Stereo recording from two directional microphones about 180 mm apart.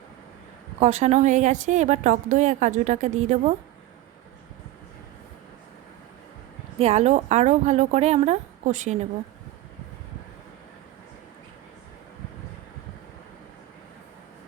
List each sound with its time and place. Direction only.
0.8 s a woman's voice: 35° right (ahead or behind)
6.7 s a woman's voice: 35° right (ahead or behind)